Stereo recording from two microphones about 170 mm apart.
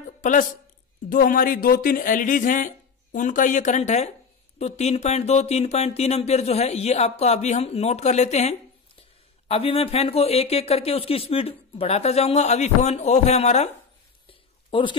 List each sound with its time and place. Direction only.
0.2 s speech: 50° left (ahead or behind)
14.7 s speech: 30° left (ahead or behind)